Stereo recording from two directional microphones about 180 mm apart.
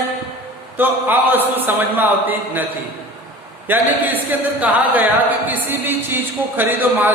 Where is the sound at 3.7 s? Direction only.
10° right (ahead or behind).